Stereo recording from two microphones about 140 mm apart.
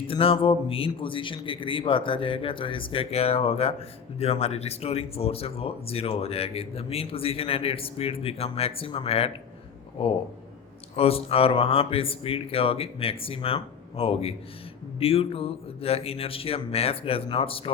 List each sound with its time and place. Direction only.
0.1 s a man's voice: 40° left (ahead or behind)